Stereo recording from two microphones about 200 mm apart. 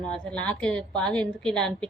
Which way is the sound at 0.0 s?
5° left (ahead or behind).